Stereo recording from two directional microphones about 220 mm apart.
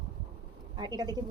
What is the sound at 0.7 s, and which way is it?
Speech, 20° right (ahead or behind).